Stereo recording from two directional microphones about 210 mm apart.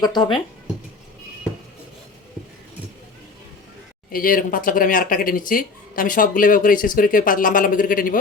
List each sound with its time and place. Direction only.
0.0 s speech: 20° left (ahead or behind)
4.1 s speech: 40° left (ahead or behind)